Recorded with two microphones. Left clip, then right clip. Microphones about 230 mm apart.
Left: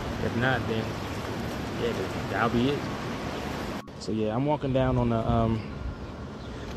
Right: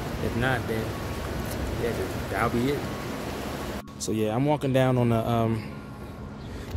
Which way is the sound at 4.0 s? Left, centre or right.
Centre.